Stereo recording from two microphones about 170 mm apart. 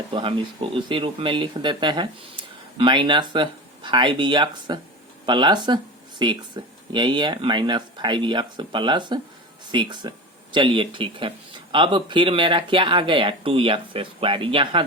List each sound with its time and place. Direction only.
0.1 s speech: 30° right (ahead or behind)